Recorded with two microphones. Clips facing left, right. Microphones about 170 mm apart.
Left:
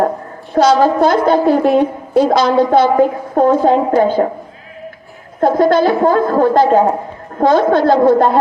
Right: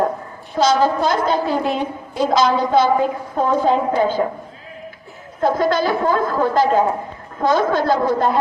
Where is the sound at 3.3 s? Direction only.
50° left (ahead or behind).